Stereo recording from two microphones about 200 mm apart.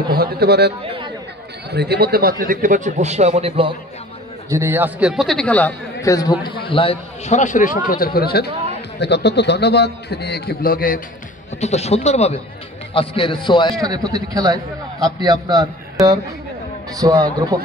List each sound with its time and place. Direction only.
0.1 s a man's voice: 50° right (ahead or behind); by 3.7 s 30° right (ahead or behind)
4.5 s a man's voice: 15° right (ahead or behind); by 5.8 s 5° left (ahead or behind)
6.0 s a man's voice: 20° left (ahead or behind); by 11.0 s 45° left (ahead or behind)
11.6 s a man's voice: 35° left (ahead or behind)
13.8 s a man's voice: 20° right (ahead or behind)